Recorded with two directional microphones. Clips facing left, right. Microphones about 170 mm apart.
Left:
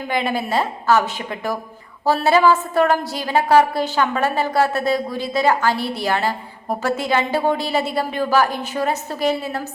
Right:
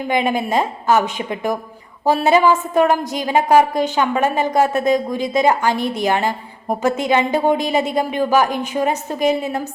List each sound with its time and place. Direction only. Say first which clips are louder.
0.1 s a woman's voice: right 3 dB; 15° right (ahead or behind)